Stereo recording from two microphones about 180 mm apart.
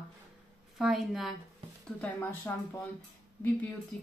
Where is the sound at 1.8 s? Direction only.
10° left (ahead or behind).